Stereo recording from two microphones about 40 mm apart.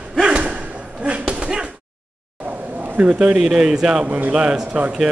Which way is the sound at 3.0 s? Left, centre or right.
Right.